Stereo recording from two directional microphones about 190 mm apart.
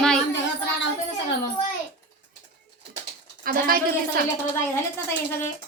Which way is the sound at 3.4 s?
50° right (ahead or behind).